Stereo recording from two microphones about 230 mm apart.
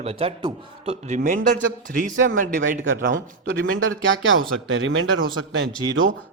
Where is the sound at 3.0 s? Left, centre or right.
Right.